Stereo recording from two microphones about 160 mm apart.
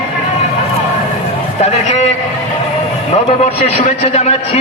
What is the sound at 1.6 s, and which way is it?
Speech, 40° left (ahead or behind).